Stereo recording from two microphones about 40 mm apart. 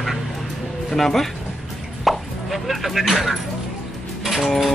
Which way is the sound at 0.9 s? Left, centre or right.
Centre.